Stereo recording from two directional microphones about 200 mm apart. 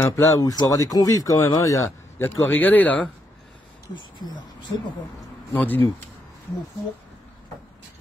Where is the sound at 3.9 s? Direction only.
20° left (ahead or behind).